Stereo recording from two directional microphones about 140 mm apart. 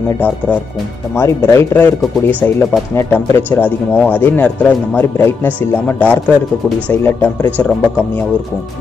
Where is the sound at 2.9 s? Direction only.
15° left (ahead or behind).